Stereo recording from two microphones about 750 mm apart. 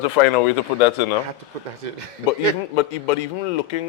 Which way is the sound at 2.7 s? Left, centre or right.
Left.